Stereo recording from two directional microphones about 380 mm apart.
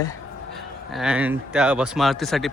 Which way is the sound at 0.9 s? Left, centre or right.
Centre.